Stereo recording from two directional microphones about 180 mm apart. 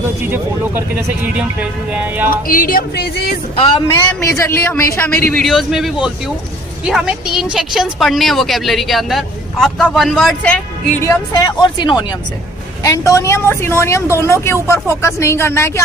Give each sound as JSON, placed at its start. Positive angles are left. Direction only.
{"t": 0.2, "sound": "speech", "side_deg": -15}
{"t": 2.3, "sound": "music", "side_deg": 50}
{"t": 3.5, "sound": "speech", "side_deg": 30}
{"t": 4.4, "sound": "a man's voice", "side_deg": 15}
{"t": 11.0, "sound": "a man's voice", "side_deg": 20}